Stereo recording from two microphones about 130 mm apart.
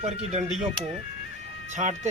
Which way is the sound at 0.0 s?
60° right (ahead or behind).